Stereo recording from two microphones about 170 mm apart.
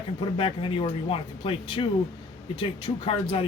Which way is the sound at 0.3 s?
30° left (ahead or behind).